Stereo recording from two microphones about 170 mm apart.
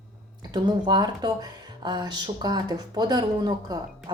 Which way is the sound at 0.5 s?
25° right (ahead or behind).